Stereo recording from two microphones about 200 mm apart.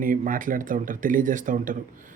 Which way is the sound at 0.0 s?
45° right (ahead or behind).